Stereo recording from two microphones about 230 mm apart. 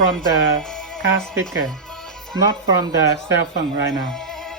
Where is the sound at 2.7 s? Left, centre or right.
Centre.